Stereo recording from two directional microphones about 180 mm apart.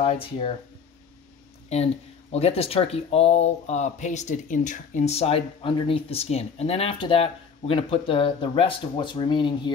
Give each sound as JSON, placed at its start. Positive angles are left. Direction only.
{"t": 0.0, "sound": "speech", "side_deg": 30}
{"t": 2.3, "sound": "speech", "side_deg": 35}